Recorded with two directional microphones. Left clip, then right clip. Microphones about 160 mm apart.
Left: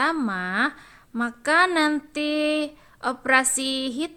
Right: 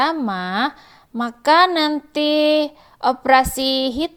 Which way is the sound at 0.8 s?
20° right (ahead or behind).